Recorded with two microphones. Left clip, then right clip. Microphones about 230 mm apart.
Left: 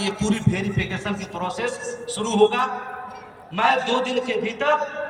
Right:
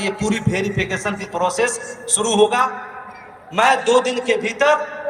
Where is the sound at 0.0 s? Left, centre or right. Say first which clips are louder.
Right 3 dB; right.